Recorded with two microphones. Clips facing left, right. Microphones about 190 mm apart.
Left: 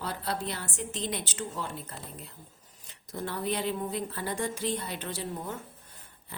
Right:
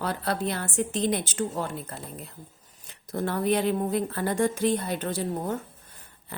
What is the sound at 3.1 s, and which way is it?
Speech, 50° right (ahead or behind).